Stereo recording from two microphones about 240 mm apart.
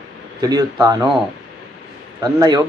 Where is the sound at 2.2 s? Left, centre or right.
Centre.